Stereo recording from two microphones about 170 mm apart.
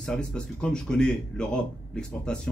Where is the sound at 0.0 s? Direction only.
5° left (ahead or behind).